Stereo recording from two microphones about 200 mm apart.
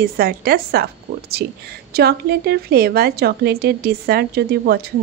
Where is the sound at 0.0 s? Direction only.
50° right (ahead or behind).